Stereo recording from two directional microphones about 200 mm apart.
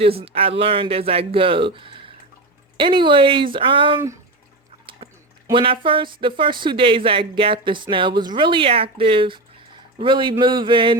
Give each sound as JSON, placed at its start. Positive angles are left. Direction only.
{"t": 0.0, "sound": "speech", "side_deg": -30}
{"t": 5.5, "sound": "speech", "side_deg": -25}